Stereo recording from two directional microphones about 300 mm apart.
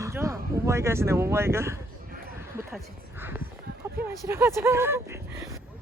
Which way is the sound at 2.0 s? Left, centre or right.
Right.